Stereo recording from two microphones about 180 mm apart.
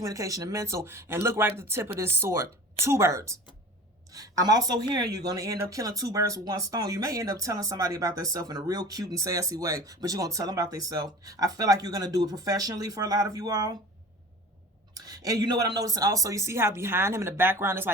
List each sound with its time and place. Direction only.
0.0 s a woman's voice: 20° right (ahead or behind)
14.9 s speech: 20° right (ahead or behind)